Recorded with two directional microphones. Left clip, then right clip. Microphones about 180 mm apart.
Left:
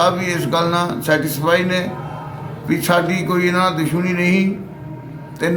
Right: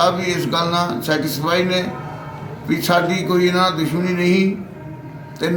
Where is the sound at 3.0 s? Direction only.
25° left (ahead or behind).